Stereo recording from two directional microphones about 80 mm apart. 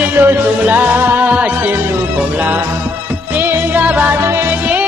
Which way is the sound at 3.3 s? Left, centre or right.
Right.